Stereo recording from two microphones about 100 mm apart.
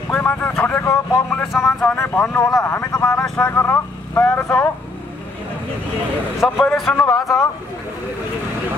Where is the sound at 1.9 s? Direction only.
20° left (ahead or behind).